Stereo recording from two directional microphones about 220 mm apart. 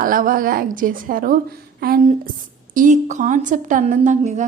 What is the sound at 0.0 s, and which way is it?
A woman's voice, 40° right (ahead or behind).